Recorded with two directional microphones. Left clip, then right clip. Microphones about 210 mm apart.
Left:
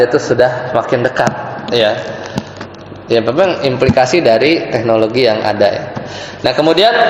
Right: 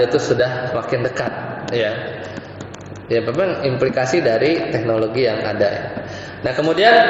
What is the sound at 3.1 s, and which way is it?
A man's voice, 10° left (ahead or behind).